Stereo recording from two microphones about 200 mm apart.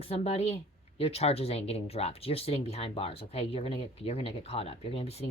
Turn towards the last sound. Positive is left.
turn(degrees=30)  # may be behind; listen again after turning